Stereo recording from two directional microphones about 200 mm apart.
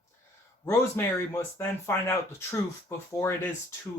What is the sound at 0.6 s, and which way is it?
Speech, 15° left (ahead or behind).